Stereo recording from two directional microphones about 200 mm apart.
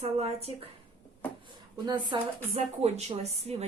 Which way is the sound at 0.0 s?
30° right (ahead or behind).